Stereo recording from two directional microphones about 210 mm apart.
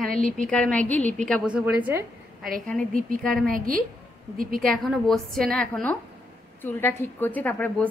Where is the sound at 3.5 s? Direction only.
40° right (ahead or behind).